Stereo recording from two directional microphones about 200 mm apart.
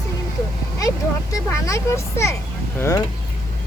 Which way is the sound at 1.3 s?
15° left (ahead or behind).